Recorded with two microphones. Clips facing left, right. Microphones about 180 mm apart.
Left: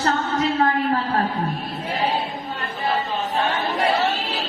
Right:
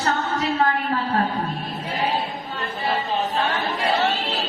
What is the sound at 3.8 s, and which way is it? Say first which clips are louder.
Chatter: even; centre (ahead or behind).